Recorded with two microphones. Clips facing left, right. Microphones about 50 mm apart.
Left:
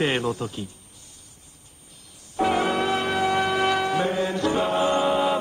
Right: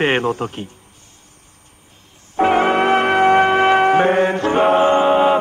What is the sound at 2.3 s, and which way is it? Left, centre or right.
Music, right.